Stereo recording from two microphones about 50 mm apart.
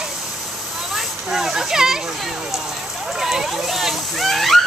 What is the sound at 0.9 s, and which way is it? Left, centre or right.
Speech, centre.